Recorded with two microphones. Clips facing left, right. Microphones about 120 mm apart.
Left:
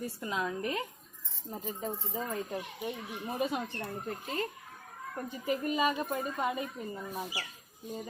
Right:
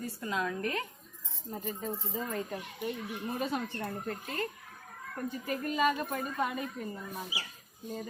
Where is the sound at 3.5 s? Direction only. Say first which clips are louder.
Right 1 dB; 15° left (ahead or behind).